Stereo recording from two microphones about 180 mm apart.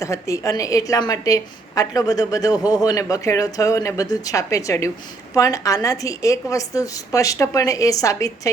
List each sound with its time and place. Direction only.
0.0 s a woman's voice: 15° left (ahead or behind)